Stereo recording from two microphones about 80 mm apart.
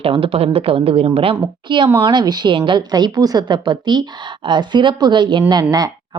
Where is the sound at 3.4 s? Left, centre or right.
Right.